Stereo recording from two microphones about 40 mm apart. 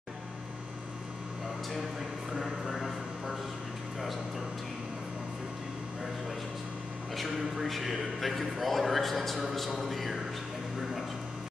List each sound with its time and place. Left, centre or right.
7.2 s a man's voice: centre